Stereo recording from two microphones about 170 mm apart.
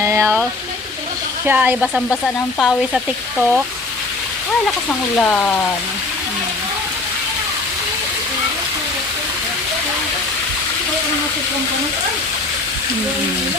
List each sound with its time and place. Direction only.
0.0 s a sound: 15° right (ahead or behind)
1.5 s speech: 10° right (ahead or behind)
2.0 s speech: 5° left (ahead or behind)
4.9 s speech: 10° left (ahead or behind)